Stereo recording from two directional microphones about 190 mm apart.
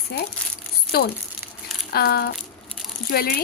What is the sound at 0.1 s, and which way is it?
A woman's voice, 55° left (ahead or behind).